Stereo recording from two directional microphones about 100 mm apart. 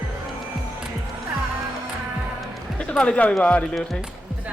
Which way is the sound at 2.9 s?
10° left (ahead or behind).